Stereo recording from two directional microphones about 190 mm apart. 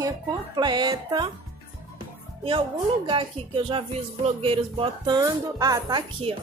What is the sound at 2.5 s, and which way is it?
Speech, 25° right (ahead or behind).